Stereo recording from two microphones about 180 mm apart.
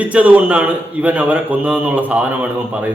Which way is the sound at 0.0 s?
10° right (ahead or behind).